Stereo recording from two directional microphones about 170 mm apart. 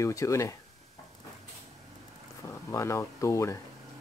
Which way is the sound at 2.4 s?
15° left (ahead or behind).